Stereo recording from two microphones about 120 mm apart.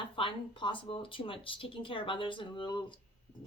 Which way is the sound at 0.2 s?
45° left (ahead or behind).